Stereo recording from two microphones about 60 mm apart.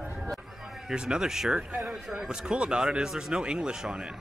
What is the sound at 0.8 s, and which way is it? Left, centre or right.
Speech, centre.